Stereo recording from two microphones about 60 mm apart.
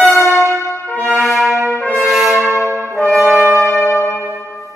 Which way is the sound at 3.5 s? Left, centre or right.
Left.